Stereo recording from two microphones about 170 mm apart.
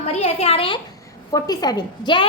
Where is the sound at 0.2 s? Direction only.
40° left (ahead or behind).